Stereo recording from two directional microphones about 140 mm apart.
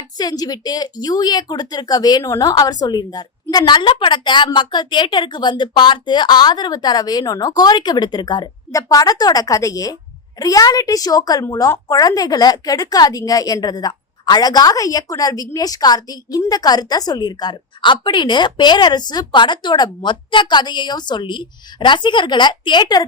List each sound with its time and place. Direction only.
0.2 s a woman's voice: 30° left (ahead or behind)